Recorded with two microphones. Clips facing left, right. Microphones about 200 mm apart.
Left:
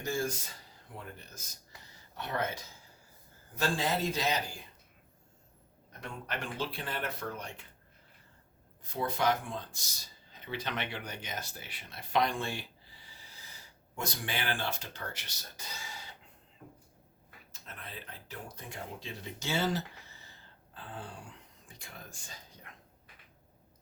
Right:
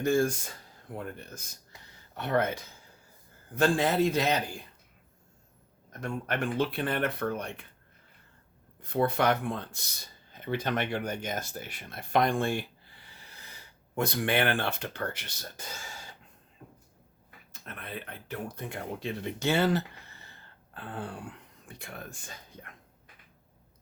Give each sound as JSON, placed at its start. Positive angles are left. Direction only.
{"t": 0.0, "sound": "speech", "side_deg": -55}
{"t": 5.9, "sound": "speech", "side_deg": -50}
{"t": 8.8, "sound": "speech", "side_deg": -60}
{"t": 17.5, "sound": "speech", "side_deg": -60}